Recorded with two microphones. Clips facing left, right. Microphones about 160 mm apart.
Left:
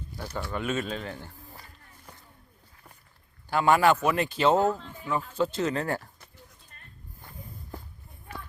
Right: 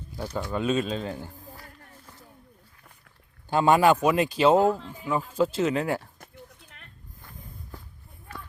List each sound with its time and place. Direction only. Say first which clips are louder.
0.3 s speech: right 4 dB; 20° right (ahead or behind)
3.5 s speech: right 2 dB; 20° right (ahead or behind)
6.7 s a sound: right 4 dB; 80° right